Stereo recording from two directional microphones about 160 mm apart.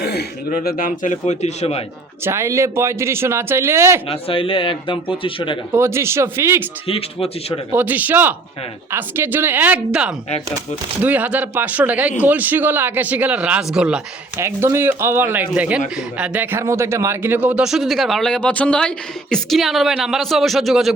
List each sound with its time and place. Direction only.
0.0 s speech: 90° left; by 1.8 s 40° left (ahead or behind)
2.2 s a man's voice: 15° right (ahead or behind)
4.1 s a man's voice: 35° left (ahead or behind)
5.7 s a man's voice: 15° right (ahead or behind)
6.8 s a man's voice: 35° left (ahead or behind)
7.7 s a man's voice: 10° right (ahead or behind)
14.3 s a man's voice: 15° right (ahead or behind); by 20.9 s centre (ahead or behind)